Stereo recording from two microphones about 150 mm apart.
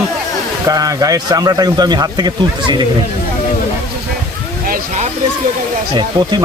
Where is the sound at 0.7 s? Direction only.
25° right (ahead or behind).